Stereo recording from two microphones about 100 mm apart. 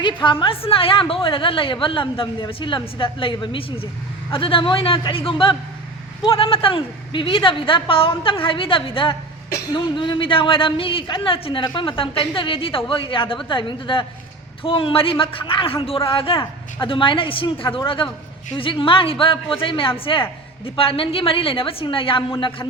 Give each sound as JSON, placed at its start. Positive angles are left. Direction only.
{"t": 0.0, "sound": "a woman's voice", "side_deg": 55}
{"t": 9.7, "sound": "a woman's voice", "side_deg": 50}